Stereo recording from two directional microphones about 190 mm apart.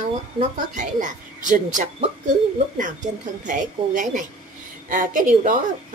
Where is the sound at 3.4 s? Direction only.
40° right (ahead or behind).